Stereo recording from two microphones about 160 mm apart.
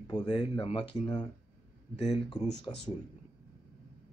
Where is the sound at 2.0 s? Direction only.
25° left (ahead or behind).